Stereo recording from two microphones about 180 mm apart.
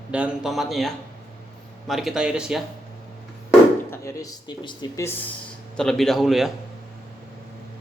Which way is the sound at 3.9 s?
15° left (ahead or behind).